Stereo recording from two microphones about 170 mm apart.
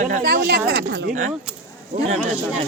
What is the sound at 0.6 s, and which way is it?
Speech, 80° right.